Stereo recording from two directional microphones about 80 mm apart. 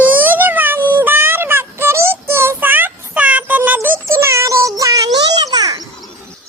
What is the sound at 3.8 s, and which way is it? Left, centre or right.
Child singing, right.